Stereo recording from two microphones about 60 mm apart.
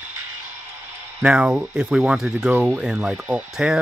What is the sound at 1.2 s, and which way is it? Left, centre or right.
Speech, centre.